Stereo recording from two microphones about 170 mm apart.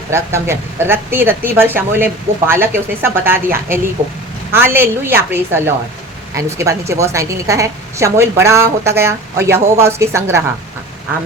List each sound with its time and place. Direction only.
0.1 s a woman's voice: 15° right (ahead or behind)